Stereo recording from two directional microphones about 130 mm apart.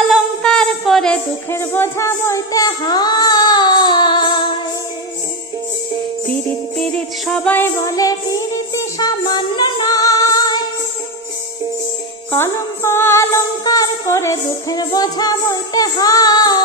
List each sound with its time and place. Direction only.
0.0 s a sound: 5° left (ahead or behind)
1.5 s child singing: 15° left (ahead or behind); by 4.6 s 35° left (ahead or behind)
6.8 s music: 5° left (ahead or behind); by 10.6 s 30° left (ahead or behind)
12.4 s music: 20° left (ahead or behind)